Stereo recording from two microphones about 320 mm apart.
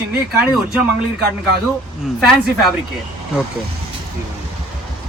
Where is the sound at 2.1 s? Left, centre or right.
Centre.